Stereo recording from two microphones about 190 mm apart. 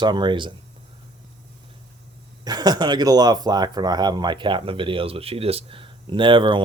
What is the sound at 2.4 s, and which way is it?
Speech, 20° right (ahead or behind).